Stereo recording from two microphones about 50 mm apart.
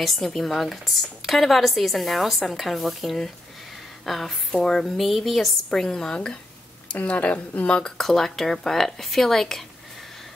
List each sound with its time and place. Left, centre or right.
0.0 s a woman's voice: centre
5.7 s a woman's voice: centre
6.9 s speech: left
7.8 s a woman's voice: centre